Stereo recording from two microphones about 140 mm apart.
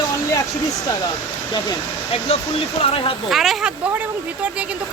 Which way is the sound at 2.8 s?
40° left (ahead or behind).